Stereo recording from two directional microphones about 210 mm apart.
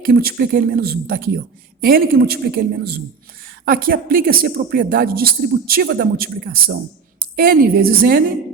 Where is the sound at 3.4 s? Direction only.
45° right (ahead or behind).